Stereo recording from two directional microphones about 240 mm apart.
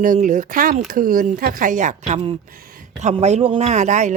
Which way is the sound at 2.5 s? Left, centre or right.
Right.